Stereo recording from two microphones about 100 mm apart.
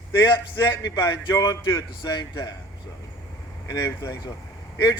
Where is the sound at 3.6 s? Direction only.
35° left (ahead or behind).